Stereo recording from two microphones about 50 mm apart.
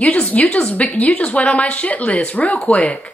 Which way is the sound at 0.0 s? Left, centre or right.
Left.